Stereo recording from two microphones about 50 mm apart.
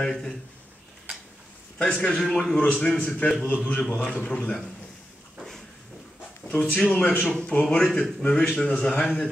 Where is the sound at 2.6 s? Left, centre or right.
Left.